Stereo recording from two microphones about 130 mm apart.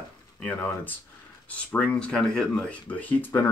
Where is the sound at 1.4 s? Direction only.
10° left (ahead or behind).